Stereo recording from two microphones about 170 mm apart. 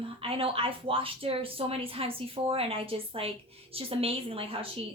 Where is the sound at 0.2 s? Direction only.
35° right (ahead or behind).